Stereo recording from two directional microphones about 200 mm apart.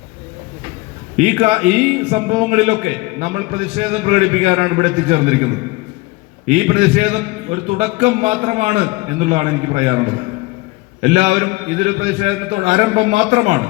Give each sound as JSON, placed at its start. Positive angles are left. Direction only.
{"t": 1.1, "sound": "a man's voice", "side_deg": -35}
{"t": 6.5, "sound": "a man's voice", "side_deg": -35}
{"t": 11.0, "sound": "a man's voice", "side_deg": -35}